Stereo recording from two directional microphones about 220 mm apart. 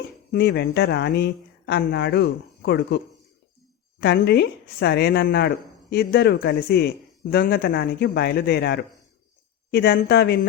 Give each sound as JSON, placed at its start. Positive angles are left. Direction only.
{"t": 0.3, "sound": "speech", "side_deg": 45}
{"t": 4.0, "sound": "speech", "side_deg": 45}